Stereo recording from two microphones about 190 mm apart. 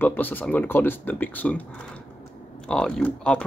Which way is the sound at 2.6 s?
5° left (ahead or behind).